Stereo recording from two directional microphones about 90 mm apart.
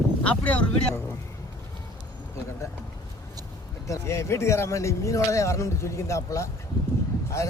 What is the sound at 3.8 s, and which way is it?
Speech, 30° left (ahead or behind).